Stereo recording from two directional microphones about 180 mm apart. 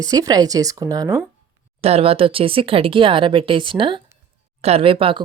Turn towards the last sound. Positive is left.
turn(degrees=-30)  # may be behind; listen again after turning